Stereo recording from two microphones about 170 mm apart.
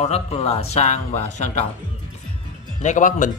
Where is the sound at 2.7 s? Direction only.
45° left (ahead or behind).